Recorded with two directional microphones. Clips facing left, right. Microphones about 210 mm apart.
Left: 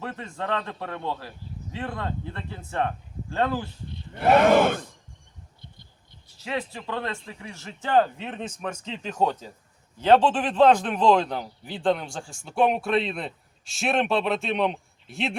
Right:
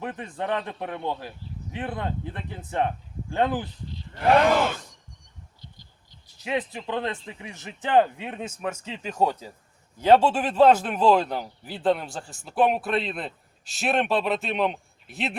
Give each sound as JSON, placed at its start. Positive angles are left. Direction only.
{"t": 0.0, "sound": "speech", "side_deg": -15}
{"t": 4.2, "sound": "speech", "side_deg": 5}
{"t": 4.5, "sound": "speech", "side_deg": 55}
{"t": 6.4, "sound": "a man's voice", "side_deg": -20}